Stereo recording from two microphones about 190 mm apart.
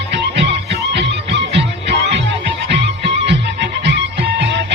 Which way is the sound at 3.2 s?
65° right (ahead or behind).